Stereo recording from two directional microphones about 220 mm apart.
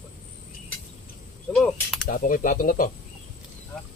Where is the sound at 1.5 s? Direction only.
Centre (ahead or behind).